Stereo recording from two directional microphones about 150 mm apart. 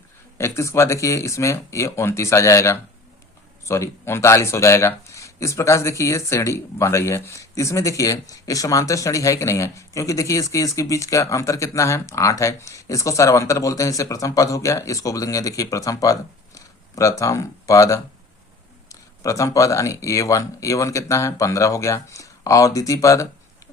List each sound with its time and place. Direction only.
0.3 s speech: 20° left (ahead or behind)